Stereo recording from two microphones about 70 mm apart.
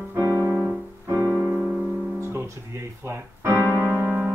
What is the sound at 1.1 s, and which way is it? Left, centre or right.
Piano, right.